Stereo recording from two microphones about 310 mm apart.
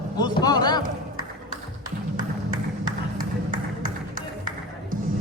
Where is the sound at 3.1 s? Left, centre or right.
Right.